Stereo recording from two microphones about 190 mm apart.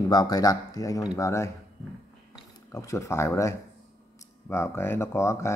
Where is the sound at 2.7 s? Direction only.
15° left (ahead or behind).